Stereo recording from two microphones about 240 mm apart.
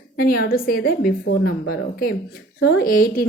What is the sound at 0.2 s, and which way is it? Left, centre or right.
A woman's voice, left.